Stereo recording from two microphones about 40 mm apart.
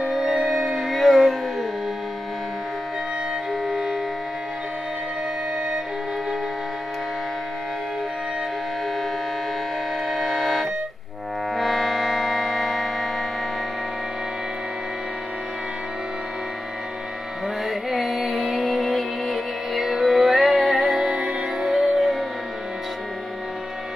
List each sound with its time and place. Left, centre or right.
0.0 s music: centre
3.6 s wind instrument: centre
10.0 s accordion: centre
11.5 s music: centre
17.6 s music: centre
20.9 s music: centre
21.2 s music: right
21.6 s music: centre